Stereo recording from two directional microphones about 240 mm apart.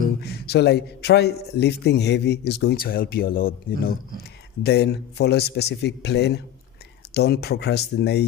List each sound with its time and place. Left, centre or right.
0.2 s a man's voice: left